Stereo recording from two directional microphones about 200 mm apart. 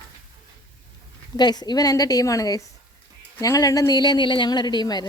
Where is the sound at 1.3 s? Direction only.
20° left (ahead or behind).